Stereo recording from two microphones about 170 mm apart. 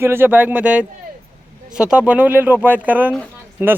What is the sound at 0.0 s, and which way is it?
Speech, 10° right (ahead or behind).